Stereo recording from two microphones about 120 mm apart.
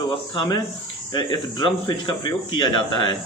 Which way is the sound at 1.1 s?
40° left (ahead or behind).